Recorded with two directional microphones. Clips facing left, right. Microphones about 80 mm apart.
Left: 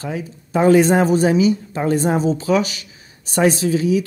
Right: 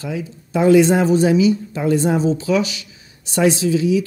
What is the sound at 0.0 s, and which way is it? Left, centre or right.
Speech, left.